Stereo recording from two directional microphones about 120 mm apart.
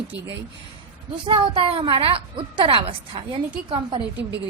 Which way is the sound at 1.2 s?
45° right (ahead or behind).